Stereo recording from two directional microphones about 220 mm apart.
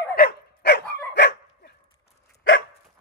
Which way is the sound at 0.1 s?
45° left (ahead or behind).